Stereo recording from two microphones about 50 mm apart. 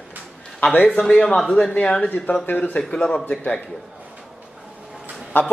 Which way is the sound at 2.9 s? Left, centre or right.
Centre.